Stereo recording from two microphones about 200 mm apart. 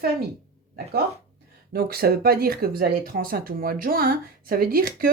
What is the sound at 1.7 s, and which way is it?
Speech, 50° right (ahead or behind).